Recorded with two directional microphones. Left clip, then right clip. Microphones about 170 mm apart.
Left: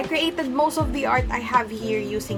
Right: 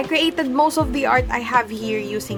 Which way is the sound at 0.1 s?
40° right (ahead or behind).